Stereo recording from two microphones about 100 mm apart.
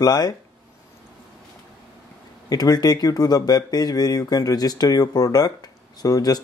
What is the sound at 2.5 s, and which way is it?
Speech, 40° left (ahead or behind).